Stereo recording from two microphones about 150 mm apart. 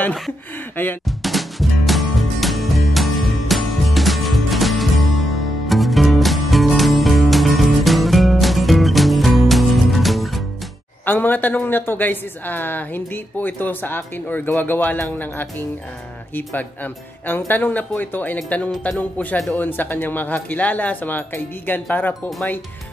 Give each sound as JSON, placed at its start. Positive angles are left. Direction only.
{"t": 1.0, "sound": "music", "side_deg": 0}
{"t": 11.1, "sound": "speech", "side_deg": 10}